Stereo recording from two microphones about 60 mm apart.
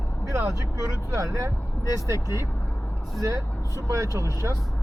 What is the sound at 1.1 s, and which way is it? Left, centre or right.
Speech, right.